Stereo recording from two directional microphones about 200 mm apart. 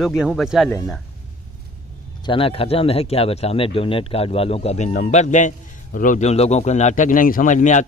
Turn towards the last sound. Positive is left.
turn(degrees=40)  # may be behind; listen again after turning